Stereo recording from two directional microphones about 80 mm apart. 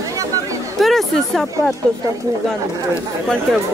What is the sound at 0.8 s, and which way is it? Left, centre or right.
Speech, centre.